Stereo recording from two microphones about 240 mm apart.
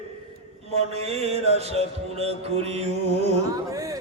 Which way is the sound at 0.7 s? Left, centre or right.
Right.